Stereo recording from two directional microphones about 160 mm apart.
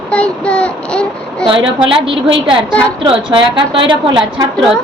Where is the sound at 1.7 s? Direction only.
30° right (ahead or behind).